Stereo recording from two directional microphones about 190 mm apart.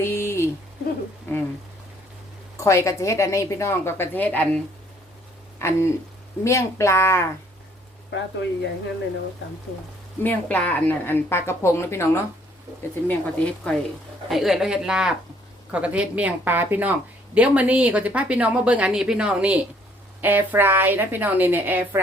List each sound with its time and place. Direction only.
0.0 s a sound: 15° left (ahead or behind)
2.6 s a woman's voice: 15° left (ahead or behind)
8.1 s speech: 65° left (ahead or behind)
10.2 s a woman's voice: 10° left (ahead or behind); by 21.8 s 10° right (ahead or behind)